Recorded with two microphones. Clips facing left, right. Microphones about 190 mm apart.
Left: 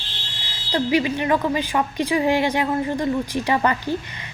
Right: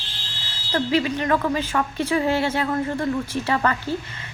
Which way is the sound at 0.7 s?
15° left (ahead or behind).